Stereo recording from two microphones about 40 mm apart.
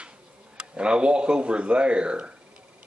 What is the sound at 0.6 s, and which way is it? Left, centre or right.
A man's voice, right.